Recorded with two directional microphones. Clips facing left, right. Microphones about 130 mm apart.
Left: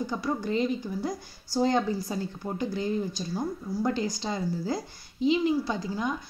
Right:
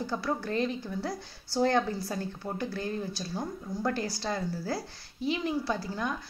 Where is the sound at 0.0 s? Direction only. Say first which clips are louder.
Left 2 dB; 15° left (ahead or behind).